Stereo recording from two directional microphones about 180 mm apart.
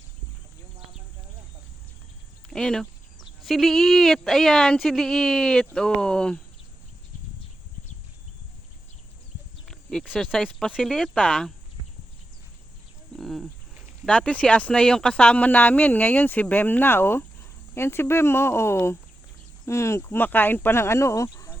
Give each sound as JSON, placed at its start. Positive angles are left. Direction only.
{"t": 2.5, "sound": "speech", "side_deg": 5}
{"t": 9.6, "sound": "speech", "side_deg": 0}
{"t": 13.1, "sound": "a sound", "side_deg": 0}
{"t": 14.0, "sound": "speech", "side_deg": 5}